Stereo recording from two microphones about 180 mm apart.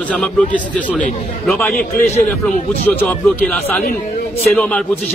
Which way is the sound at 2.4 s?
10° left (ahead or behind).